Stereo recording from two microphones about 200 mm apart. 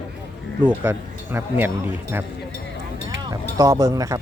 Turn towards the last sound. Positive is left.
turn(degrees=-15)  # may be behind; listen again after turning